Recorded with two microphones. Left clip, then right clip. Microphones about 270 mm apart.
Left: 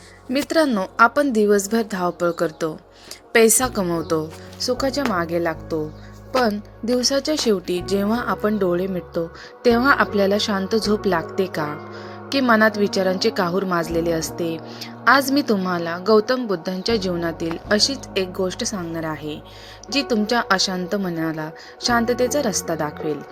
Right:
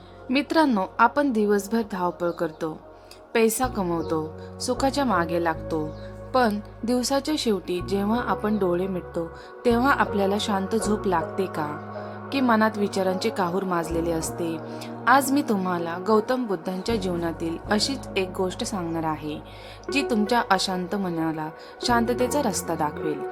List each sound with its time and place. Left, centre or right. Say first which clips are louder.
0.3 s a woman's voice: left 2 dB; centre